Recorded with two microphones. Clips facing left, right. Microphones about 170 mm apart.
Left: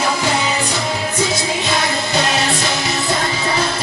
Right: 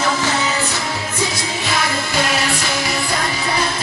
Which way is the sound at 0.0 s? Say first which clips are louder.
Left 1 dB; 15° left (ahead or behind).